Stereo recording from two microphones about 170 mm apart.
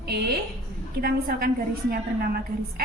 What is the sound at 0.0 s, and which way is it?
A woman's voice, 70° right (ahead or behind).